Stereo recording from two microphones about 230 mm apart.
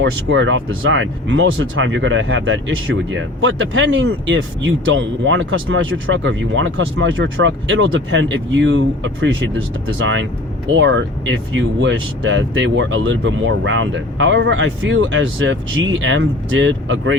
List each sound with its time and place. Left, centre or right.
0.0 s speech: right
10.8 s speech: right